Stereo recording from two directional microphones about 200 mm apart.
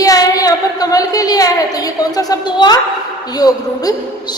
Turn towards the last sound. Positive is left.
turn(degrees=20)  # may be behind; listen again after turning